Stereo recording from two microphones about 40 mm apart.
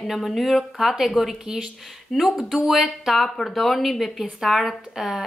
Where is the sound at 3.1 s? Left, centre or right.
Centre.